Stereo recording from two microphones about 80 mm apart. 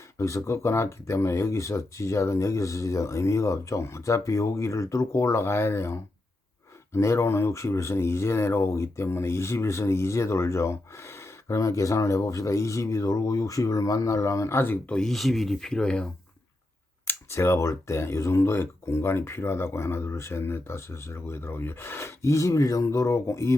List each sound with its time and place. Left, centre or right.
0.2 s speech: left
14.8 s speech: centre
17.1 s speech: left